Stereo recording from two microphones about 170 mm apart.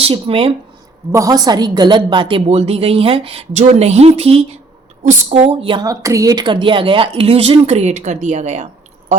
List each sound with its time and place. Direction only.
0.0 s speech: 35° right (ahead or behind)
1.1 s speech: 20° right (ahead or behind); by 8.6 s 45° right (ahead or behind)